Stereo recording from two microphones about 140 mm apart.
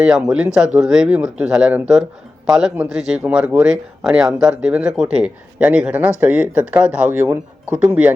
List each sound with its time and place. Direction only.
0.0 s speech: 5° right (ahead or behind)